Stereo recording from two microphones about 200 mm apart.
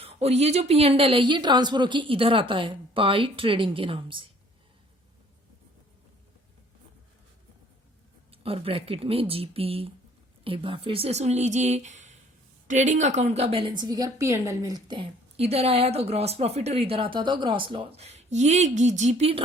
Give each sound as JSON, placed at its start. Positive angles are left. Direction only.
{"t": 0.0, "sound": "speech", "side_deg": -30}
{"t": 8.3, "sound": "a woman's voice", "side_deg": -30}